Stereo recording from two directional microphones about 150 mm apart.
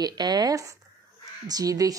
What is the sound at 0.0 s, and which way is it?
A woman's voice, 25° right (ahead or behind).